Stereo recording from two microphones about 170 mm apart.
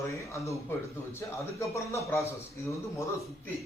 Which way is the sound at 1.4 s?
15° left (ahead or behind).